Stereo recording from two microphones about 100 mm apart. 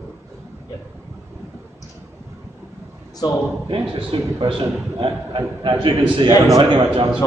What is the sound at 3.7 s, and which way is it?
A man's voice, 60° right (ahead or behind).